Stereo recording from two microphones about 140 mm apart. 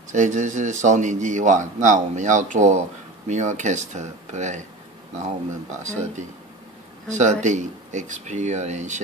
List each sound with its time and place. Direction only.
0.1 s speech: 60° right (ahead or behind)